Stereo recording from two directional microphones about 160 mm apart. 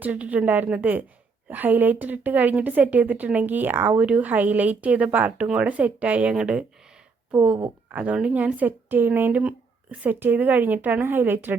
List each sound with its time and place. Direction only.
0.0 s a woman's voice: 10° right (ahead or behind)